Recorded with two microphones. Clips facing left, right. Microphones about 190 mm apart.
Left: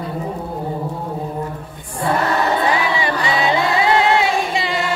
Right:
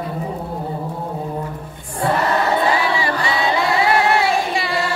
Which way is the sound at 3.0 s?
20° left (ahead or behind).